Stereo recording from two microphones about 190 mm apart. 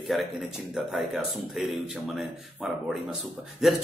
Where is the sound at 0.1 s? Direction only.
Centre (ahead or behind).